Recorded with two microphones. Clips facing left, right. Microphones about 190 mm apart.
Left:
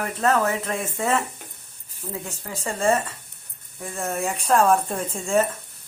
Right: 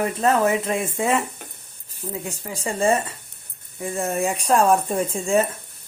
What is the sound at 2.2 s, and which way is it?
A woman's voice, 15° right (ahead or behind).